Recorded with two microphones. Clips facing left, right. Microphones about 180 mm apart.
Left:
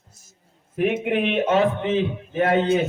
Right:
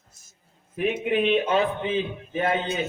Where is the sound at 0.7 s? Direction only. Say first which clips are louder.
Left 2 dB; 70° left (ahead or behind).